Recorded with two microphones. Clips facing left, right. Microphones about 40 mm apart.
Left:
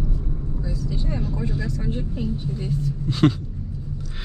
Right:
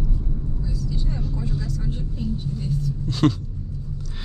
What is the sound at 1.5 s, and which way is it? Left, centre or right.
Speech, left.